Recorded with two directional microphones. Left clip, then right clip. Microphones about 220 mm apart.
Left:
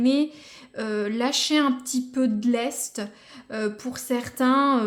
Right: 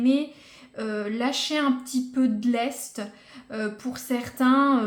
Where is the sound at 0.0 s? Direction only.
35° left (ahead or behind).